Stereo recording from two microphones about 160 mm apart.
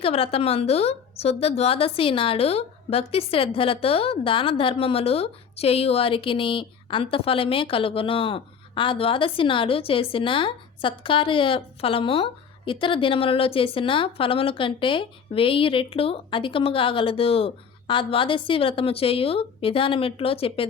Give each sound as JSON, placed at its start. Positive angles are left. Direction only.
{"t": 0.0, "sound": "a woman's voice", "side_deg": 35}